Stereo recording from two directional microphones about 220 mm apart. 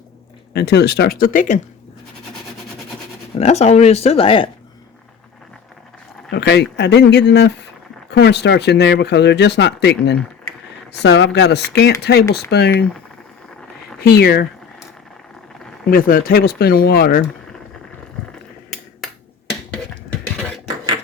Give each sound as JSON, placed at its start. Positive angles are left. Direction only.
{"t": 0.5, "sound": "speech", "side_deg": 45}
{"t": 3.3, "sound": "speech", "side_deg": 30}
{"t": 6.3, "sound": "speech", "side_deg": 50}
{"t": 14.0, "sound": "speech", "side_deg": 45}
{"t": 15.9, "sound": "speech", "side_deg": 40}
{"t": 18.3, "sound": "a sound", "side_deg": 0}